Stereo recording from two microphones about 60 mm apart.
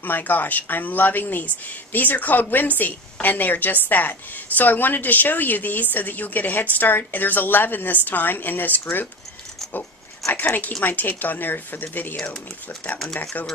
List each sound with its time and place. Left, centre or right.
0.0 s a woman's voice: left
10.3 s a woman's voice: left